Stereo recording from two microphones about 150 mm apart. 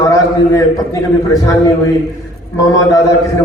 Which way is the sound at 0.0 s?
20° left (ahead or behind).